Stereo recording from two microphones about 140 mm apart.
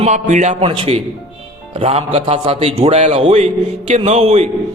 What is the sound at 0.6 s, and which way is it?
A man's voice, 40° right (ahead or behind).